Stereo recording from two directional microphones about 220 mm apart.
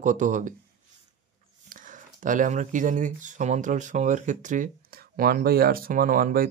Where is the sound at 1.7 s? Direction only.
35° right (ahead or behind).